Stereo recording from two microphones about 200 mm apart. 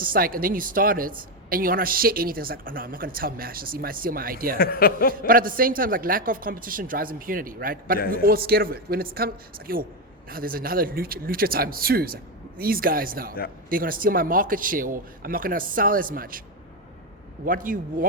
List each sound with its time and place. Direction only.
0.0 s speech: 45° right (ahead or behind)
4.5 s a woman's voice: 45° left (ahead or behind)
5.2 s speech: 45° right (ahead or behind)
17.4 s speech: 45° right (ahead or behind)